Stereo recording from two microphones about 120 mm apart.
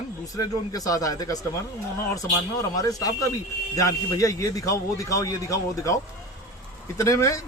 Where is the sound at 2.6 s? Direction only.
30° left (ahead or behind).